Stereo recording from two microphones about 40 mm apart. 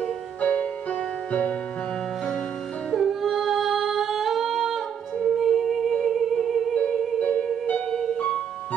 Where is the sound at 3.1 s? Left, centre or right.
Centre.